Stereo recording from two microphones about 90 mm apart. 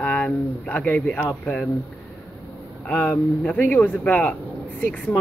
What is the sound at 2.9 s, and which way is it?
A man's voice, 15° left (ahead or behind).